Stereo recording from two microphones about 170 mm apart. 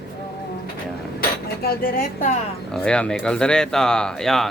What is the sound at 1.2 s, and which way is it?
Cutlery, 65° left (ahead or behind).